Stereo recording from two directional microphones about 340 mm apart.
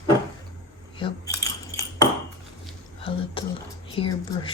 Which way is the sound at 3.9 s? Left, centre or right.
Centre.